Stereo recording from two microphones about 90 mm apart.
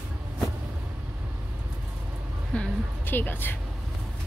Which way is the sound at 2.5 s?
15° left (ahead or behind).